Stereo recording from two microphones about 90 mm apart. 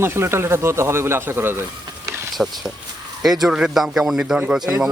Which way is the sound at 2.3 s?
Centre (ahead or behind).